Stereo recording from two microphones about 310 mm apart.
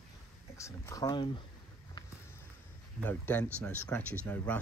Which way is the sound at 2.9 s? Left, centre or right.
Centre.